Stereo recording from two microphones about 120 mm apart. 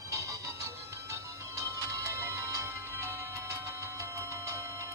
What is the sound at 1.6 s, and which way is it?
Music, 25° right (ahead or behind).